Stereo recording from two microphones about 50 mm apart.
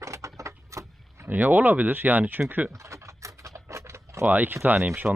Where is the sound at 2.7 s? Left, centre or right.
Right.